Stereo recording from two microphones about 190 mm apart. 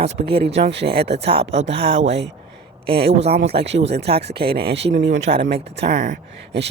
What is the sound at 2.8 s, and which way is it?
Speech, 55° right (ahead or behind).